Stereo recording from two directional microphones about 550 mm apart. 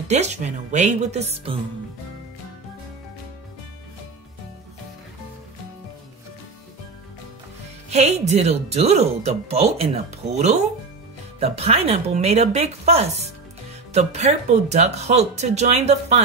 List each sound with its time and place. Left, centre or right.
0.1 s speech: centre
7.9 s speech: centre